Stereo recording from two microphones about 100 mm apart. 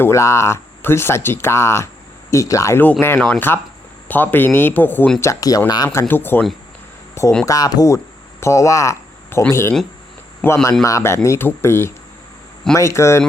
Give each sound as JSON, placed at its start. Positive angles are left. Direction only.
{"t": 0.0, "sound": "speech", "side_deg": 30}
{"t": 3.2, "sound": "speech", "side_deg": 15}
{"t": 5.2, "sound": "speech", "side_deg": 35}
{"t": 5.9, "sound": "speech", "side_deg": 25}
{"t": 7.4, "sound": "speech", "side_deg": 35}